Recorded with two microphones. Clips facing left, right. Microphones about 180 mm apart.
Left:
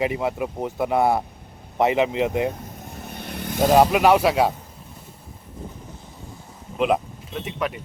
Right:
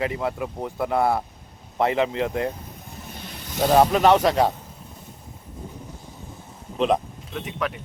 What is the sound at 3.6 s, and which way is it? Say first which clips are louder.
Speech: left 1 dB; 10° left (ahead or behind).